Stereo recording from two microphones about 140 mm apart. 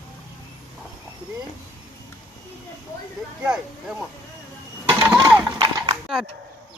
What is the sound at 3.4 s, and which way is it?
Speech, 5° right (ahead or behind).